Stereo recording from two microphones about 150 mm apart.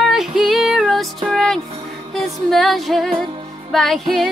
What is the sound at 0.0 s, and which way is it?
Music, centre (ahead or behind).